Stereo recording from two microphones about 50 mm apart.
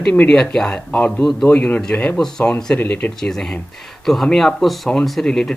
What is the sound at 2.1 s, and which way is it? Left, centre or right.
Speech, centre.